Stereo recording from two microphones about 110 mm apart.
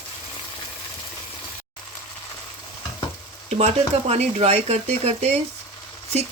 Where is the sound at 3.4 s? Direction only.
80° right.